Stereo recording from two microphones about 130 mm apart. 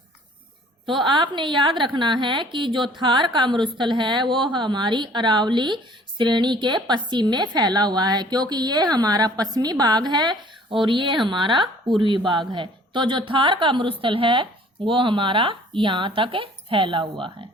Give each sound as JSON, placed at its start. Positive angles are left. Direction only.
{"t": 0.9, "sound": "a woman's voice", "side_deg": -40}